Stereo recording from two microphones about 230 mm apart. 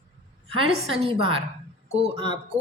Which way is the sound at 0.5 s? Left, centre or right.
Right.